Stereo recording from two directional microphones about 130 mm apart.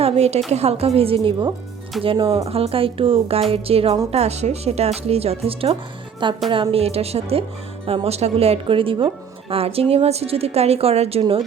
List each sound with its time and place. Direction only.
0.0 s a woman's voice: 55° right (ahead or behind)